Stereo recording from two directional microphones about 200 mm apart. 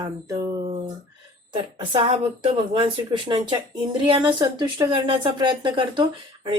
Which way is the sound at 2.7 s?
25° right (ahead or behind).